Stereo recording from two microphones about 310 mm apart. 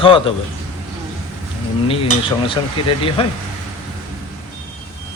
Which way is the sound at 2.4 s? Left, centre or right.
Centre.